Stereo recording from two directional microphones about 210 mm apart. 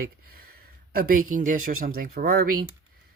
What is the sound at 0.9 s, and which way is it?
Speech, 45° right (ahead or behind).